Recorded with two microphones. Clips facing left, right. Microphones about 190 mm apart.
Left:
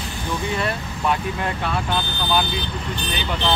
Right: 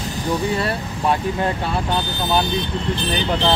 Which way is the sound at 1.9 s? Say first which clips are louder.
Right 3 dB; 20° right (ahead or behind).